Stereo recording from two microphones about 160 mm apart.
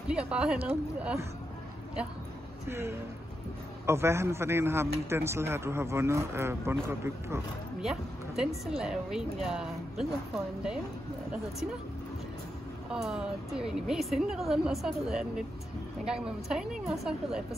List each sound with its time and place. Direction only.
0.1 s speech: 5° right (ahead or behind)
2.7 s speech: 15° right (ahead or behind)
7.8 s speech: 5° right (ahead or behind)
12.9 s speech: 5° right (ahead or behind)